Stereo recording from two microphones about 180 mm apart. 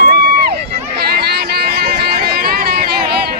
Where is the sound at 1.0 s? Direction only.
60° right (ahead or behind).